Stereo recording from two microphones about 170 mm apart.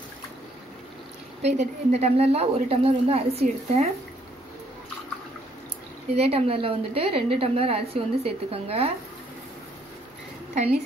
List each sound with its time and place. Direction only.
1.4 s a woman's voice: 40° right (ahead or behind)
6.1 s a woman's voice: 35° right (ahead or behind)